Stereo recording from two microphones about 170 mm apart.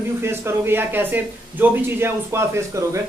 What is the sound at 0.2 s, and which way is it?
Speech, 15° right (ahead or behind).